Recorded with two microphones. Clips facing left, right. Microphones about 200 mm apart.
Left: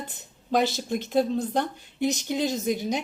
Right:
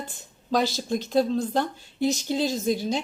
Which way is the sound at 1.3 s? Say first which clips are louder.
Right 1 dB; 20° left (ahead or behind).